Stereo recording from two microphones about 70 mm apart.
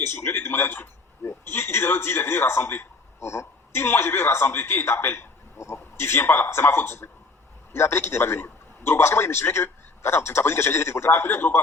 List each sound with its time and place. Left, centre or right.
0.0 s a man's voice: left